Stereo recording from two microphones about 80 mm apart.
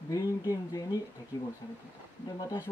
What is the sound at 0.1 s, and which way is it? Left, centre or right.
Speech, left.